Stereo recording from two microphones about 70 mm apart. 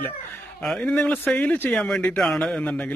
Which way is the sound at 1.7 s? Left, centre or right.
Centre.